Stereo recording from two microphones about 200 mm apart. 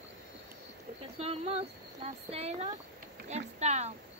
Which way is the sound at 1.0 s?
30° right (ahead or behind).